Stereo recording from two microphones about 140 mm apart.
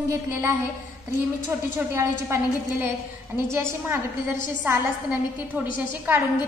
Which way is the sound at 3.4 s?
20° right (ahead or behind).